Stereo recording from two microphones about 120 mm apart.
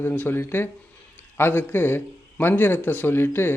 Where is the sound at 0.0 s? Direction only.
15° left (ahead or behind).